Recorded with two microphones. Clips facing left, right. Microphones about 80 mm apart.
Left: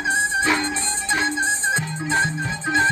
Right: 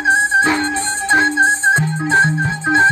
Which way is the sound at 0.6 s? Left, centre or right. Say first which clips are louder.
Right 7 dB; right.